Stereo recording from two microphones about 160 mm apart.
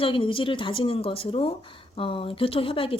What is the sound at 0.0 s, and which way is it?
Speech, 35° left (ahead or behind).